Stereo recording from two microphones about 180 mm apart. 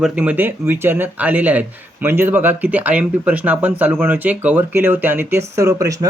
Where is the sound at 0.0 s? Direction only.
10° right (ahead or behind).